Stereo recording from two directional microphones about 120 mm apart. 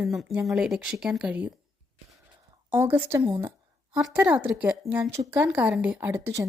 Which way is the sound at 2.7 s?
20° right (ahead or behind).